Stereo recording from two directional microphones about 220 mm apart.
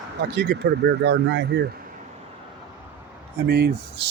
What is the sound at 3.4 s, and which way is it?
Speech, 50° right (ahead or behind).